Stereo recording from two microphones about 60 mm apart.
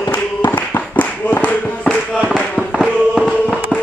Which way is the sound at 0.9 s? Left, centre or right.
Left.